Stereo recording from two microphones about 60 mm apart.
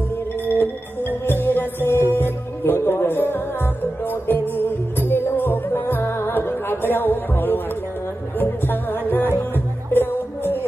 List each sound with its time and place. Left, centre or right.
0.5 s music: left